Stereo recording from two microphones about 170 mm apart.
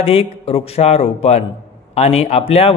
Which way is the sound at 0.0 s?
35° left (ahead or behind).